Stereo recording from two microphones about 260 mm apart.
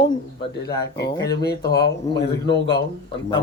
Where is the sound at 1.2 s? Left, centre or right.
Centre.